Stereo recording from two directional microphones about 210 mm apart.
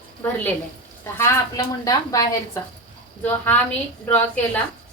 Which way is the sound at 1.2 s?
15° left (ahead or behind).